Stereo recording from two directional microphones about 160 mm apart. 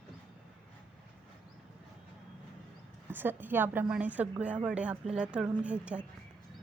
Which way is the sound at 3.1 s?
10° right (ahead or behind).